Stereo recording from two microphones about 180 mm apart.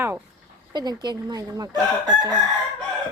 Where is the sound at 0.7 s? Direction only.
25° right (ahead or behind).